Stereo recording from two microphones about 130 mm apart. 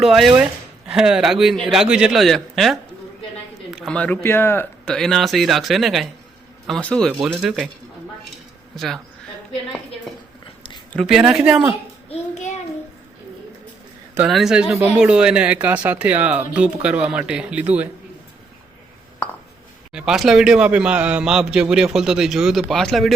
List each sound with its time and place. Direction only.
0.0 s a man's voice: centre (ahead or behind)
3.9 s speech: 10° left (ahead or behind)
4.9 s a man's voice: centre (ahead or behind)
8.7 s speech: centre (ahead or behind)
10.9 s a man's voice: 5° right (ahead or behind)
12.0 s child singing: 55° left (ahead or behind)
14.2 s speech: 5° right (ahead or behind)
19.9 s a man's voice: 5° right (ahead or behind)